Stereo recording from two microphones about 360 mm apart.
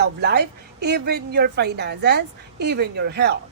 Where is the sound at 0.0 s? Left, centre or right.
Right.